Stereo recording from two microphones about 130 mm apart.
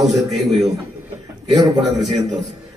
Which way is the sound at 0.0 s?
Centre (ahead or behind).